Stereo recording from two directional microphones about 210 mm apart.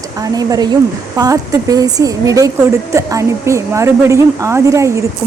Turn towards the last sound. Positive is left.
turn(degrees=-15)  # may be behind; listen again after turning